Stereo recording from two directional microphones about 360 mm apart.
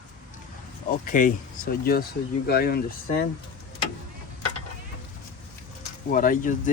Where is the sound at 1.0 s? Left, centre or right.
Left.